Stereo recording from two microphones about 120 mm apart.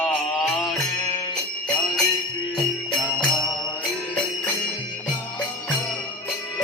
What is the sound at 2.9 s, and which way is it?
Music, 40° left (ahead or behind).